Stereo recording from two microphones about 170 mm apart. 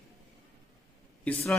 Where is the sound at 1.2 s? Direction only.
Centre (ahead or behind).